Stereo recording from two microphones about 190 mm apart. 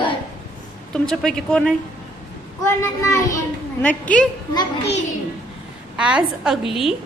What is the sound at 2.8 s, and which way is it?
A child's voice, 15° left (ahead or behind).